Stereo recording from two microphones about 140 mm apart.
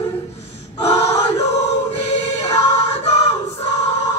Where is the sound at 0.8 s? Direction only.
50° left (ahead or behind).